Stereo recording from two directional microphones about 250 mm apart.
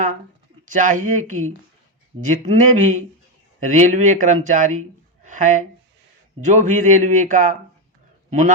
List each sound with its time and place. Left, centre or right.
0.7 s speech: right
5.2 s a sound: right
6.4 s a man's voice: right